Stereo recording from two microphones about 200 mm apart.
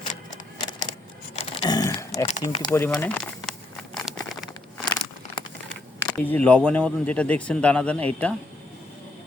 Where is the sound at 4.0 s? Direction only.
Centre (ahead or behind).